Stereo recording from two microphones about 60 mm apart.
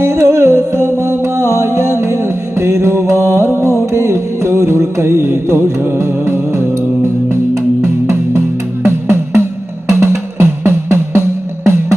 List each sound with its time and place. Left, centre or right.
0.0 s music: right